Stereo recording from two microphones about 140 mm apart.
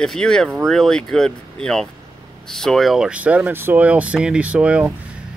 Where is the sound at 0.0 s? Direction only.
5° left (ahead or behind).